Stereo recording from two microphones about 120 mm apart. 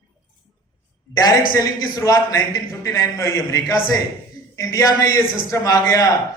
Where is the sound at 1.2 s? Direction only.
30° left (ahead or behind).